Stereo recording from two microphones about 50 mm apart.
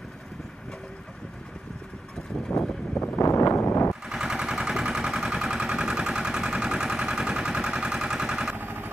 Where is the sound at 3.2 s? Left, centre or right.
Left.